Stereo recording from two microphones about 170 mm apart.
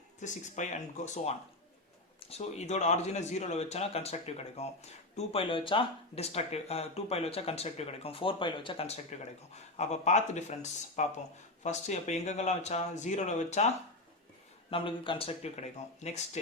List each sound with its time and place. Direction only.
0.2 s speech: 45° left (ahead or behind)
14.7 s speech: 30° left (ahead or behind)